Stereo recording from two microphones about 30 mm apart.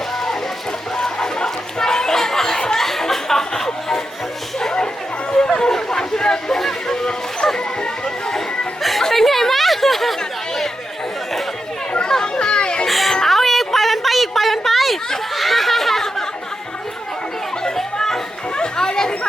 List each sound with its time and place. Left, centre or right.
0.9 s chatter: left
2.7 s a sound: centre
5.4 s chatter: centre
5.7 s a sound: left
7.8 s music: left
8.8 s music: centre
9.0 s chatter: centre
12.2 s chatter: left
12.9 s children playing: centre
13.2 s a sound: centre
15.4 s laughter: centre
18.5 s chatter: left